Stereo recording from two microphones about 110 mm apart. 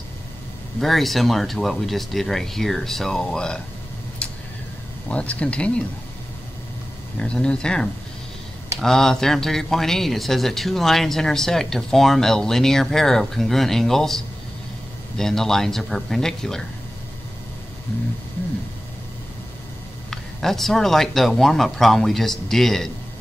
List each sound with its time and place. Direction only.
0.7 s speech: centre (ahead or behind)
5.1 s speech: 10° left (ahead or behind)
7.2 s speech: 10° left (ahead or behind)
20.1 s speech: 5° left (ahead or behind)